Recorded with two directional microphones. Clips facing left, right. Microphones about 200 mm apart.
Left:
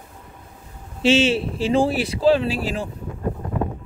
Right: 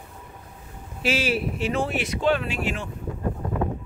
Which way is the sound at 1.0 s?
25° left (ahead or behind).